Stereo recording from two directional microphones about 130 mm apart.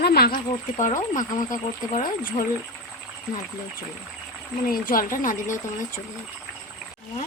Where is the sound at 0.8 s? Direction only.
80° left.